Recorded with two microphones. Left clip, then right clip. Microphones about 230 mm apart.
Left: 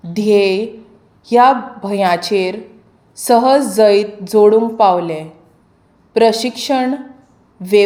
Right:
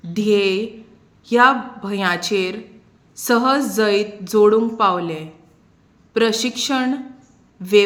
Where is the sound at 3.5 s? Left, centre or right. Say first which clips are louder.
Left 7 dB; centre.